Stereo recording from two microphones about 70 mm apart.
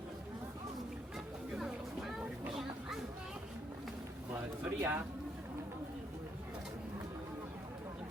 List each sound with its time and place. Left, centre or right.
1.5 s music: centre
4.8 s speech: right